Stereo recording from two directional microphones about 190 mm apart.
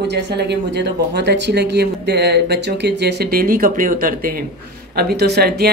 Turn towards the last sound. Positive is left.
turn(degrees=-55)  # may be behind; listen again after turning